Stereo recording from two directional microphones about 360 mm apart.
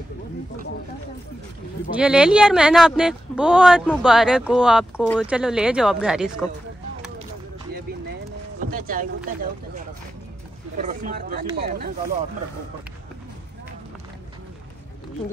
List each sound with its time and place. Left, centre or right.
2.0 s speech: centre
8.5 s a sound: right
10.8 s speech: right